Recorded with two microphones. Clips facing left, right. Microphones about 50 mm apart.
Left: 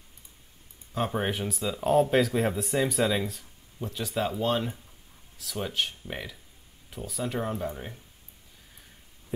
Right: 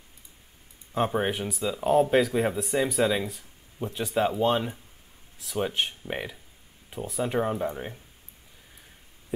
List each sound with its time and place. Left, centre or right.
0.9 s speech: centre
1.2 s speech: centre
3.8 s speech: right